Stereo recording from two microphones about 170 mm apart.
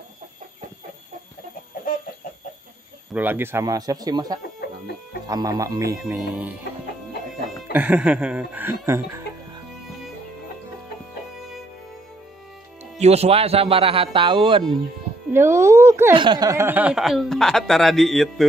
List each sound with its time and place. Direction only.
3.1 s speech: 10° right (ahead or behind)
4.6 s music: 70° left (ahead or behind)
5.3 s speech: 20° right (ahead or behind)
6.3 s music: 10° right (ahead or behind)
7.7 s music: 10° right (ahead or behind)
13.0 s a man's voice: 40° right (ahead or behind)
15.3 s music: 15° right (ahead or behind)
16.2 s speech: 25° right (ahead or behind); by 18.5 s centre (ahead or behind)